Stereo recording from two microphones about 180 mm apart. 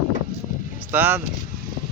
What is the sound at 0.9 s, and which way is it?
Speech, 10° right (ahead or behind).